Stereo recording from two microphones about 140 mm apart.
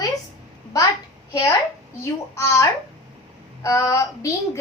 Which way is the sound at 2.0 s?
20° left (ahead or behind).